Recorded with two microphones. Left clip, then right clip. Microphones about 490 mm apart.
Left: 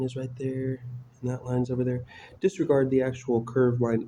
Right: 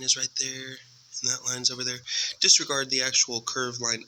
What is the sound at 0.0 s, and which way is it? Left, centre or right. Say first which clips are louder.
Speech: right 5 dB; left.